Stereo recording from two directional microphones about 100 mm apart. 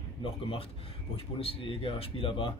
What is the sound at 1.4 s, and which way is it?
Speech, 65° left (ahead or behind).